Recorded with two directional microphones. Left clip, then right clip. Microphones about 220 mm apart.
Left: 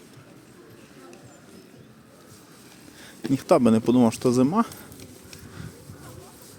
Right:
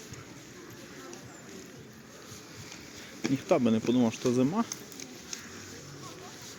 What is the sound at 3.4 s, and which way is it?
Speech, 35° left (ahead or behind).